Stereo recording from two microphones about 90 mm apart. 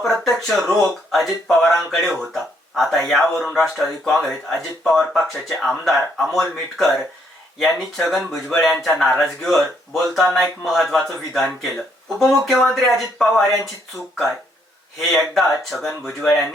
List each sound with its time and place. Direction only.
0.0 s speech: centre (ahead or behind)
14.9 s speech: centre (ahead or behind)